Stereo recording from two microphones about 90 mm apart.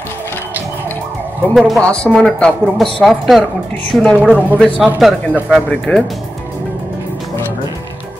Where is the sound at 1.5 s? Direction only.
Centre (ahead or behind).